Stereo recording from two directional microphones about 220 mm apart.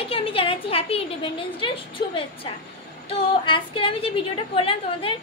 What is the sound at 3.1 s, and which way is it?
A woman's voice, 25° left (ahead or behind).